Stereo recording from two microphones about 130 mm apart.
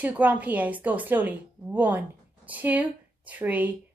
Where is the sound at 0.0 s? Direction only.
10° right (ahead or behind).